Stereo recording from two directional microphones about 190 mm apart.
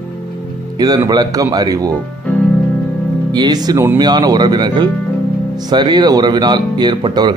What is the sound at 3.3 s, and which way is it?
Speech, 20° right (ahead or behind).